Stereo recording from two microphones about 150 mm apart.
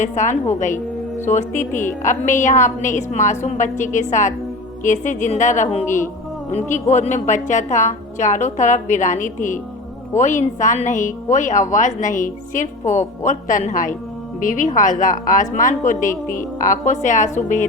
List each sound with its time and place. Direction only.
0.0 s a woman's voice: 55° left (ahead or behind)